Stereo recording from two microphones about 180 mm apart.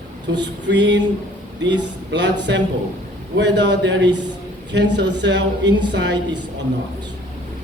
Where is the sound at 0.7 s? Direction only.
80° right.